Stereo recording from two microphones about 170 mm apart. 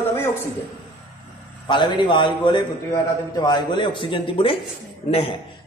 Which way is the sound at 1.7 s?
30° left (ahead or behind).